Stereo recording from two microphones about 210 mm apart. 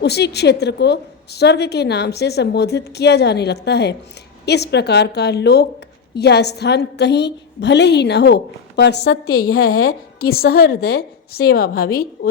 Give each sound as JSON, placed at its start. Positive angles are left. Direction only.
{"t": 0.0, "sound": "a woman's voice", "side_deg": 50}